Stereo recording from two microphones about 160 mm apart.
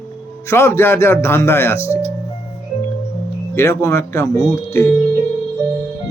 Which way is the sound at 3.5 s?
15° left (ahead or behind).